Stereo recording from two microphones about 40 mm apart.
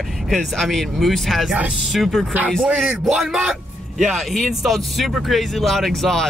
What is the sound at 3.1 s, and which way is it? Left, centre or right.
Speech, centre.